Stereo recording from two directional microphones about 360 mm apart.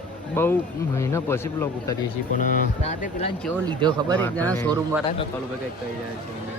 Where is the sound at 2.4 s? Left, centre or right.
Left.